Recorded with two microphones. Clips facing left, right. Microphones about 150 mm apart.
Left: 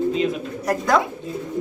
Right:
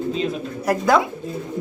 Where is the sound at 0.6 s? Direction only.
5° right (ahead or behind).